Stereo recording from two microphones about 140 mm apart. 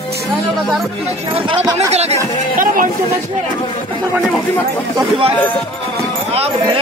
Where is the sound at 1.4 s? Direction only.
45° right (ahead or behind).